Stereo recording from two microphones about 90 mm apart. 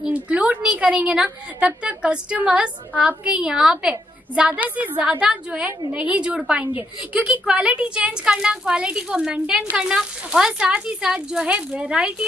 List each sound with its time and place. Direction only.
0.0 s a woman's voice: 15° right (ahead or behind)